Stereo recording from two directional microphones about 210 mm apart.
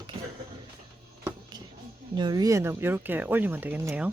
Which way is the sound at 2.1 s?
20° right (ahead or behind).